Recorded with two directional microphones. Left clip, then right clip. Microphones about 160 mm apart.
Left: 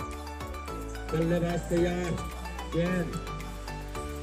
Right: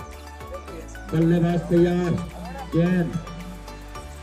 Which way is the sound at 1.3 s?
50° right (ahead or behind).